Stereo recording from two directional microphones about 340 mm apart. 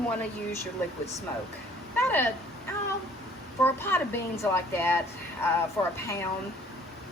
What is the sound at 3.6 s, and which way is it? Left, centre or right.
A woman's voice, centre.